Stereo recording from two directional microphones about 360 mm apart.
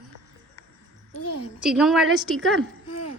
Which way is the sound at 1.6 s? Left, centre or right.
Centre.